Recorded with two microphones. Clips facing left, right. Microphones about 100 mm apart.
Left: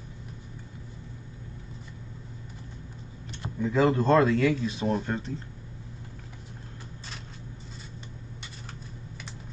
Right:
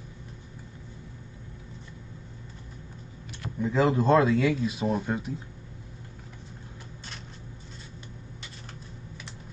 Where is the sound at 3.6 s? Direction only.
5° right (ahead or behind).